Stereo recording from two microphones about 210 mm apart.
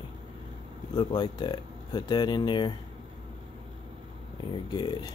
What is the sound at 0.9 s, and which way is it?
Speech, 20° left (ahead or behind).